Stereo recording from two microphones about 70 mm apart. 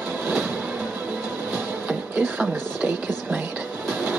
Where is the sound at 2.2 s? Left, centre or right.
Right.